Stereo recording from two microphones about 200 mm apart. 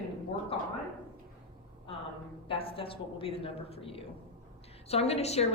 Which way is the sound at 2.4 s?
25° left (ahead or behind).